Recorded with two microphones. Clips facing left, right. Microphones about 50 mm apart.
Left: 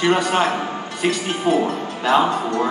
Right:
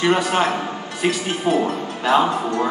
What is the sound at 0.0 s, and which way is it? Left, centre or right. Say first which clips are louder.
Speech: even; centre.